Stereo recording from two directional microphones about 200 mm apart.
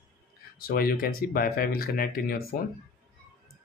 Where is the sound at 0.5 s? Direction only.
50° left (ahead or behind).